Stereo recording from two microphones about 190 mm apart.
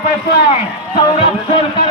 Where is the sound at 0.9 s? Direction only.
30° left (ahead or behind).